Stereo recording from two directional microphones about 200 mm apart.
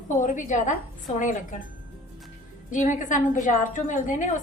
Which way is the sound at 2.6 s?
40° left (ahead or behind).